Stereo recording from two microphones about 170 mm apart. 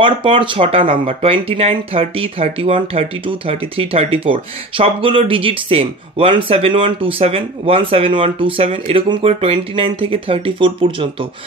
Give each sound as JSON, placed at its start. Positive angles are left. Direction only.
{"t": 0.0, "sound": "speech", "side_deg": -30}